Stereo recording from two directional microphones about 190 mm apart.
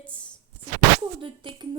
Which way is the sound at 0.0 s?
5° left (ahead or behind).